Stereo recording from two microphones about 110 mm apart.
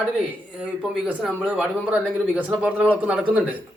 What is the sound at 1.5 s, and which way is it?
A man's voice, 10° right (ahead or behind).